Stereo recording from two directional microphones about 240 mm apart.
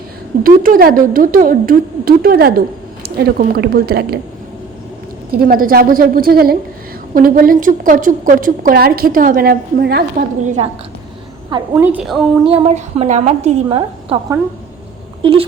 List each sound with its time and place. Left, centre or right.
0.4 s a woman's voice: right
5.3 s a woman's voice: right
11.7 s a woman's voice: centre
12.5 s a woman's voice: right